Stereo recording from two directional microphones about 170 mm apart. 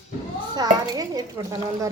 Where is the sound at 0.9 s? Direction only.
20° right (ahead or behind).